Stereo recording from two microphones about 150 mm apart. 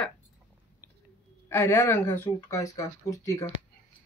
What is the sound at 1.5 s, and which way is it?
Speech, 15° left (ahead or behind).